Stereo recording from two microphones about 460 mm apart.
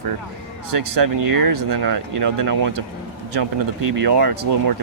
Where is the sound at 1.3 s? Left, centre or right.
Right.